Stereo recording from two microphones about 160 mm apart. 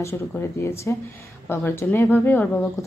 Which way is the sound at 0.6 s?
15° left (ahead or behind).